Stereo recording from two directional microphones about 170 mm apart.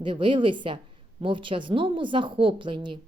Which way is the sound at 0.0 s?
30° right (ahead or behind).